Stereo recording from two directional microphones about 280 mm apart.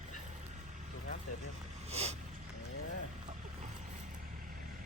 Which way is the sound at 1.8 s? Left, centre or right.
Right.